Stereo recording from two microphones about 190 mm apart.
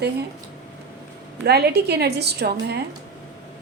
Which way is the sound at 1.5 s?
60° right (ahead or behind).